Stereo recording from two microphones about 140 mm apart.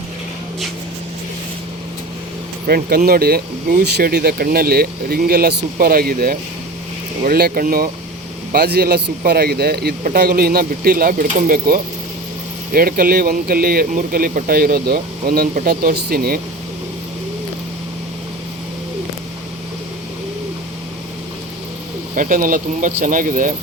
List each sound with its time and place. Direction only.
2.6 s speech: 90° right
22.1 s speech: 70° right (ahead or behind)